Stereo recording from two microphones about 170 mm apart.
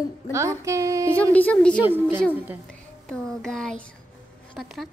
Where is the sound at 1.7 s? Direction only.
10° right (ahead or behind).